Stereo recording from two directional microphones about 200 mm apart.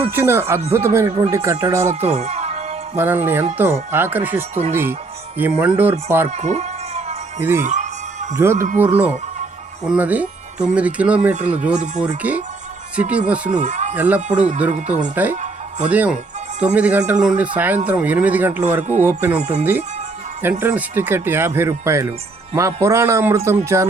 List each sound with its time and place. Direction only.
0.1 s speech: 10° right (ahead or behind)
2.0 s music: 35° right (ahead or behind)
2.9 s speech: 10° right (ahead or behind)
6.3 s a sound: 35° right (ahead or behind)
7.3 s speech: 15° right (ahead or behind)
7.6 s music: 35° right (ahead or behind)
8.4 s speech: 15° right (ahead or behind)
13.5 s speech: 35° right (ahead or behind)
13.9 s speech: 10° right (ahead or behind)
14.7 s speech: 35° right (ahead or behind)
15.1 s speech: 10° right (ahead or behind)
19.4 s speech: 35° right (ahead or behind)
20.4 s speech: 10° right (ahead or behind)